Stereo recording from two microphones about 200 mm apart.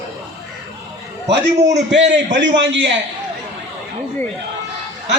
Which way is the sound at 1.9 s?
65° right (ahead or behind).